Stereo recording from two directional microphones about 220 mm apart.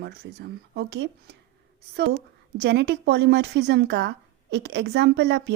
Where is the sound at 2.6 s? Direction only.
50° right (ahead or behind).